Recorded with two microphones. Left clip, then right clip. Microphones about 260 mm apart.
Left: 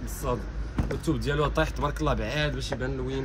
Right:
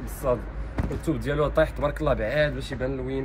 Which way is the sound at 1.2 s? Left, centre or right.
Centre.